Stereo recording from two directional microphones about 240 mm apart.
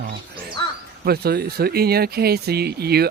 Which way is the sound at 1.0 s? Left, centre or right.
Right.